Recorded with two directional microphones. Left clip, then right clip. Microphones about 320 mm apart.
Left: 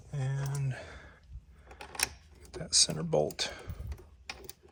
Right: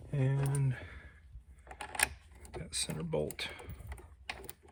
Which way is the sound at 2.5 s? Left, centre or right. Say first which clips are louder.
Left 11 dB; centre.